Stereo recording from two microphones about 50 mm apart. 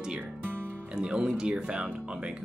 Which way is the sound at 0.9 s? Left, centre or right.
Centre.